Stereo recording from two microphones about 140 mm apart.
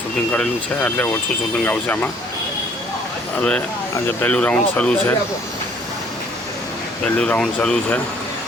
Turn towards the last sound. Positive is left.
turn(degrees=5)  # may be behind; listen again after turning